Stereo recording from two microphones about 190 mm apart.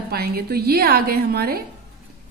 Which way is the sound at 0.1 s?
55° right (ahead or behind).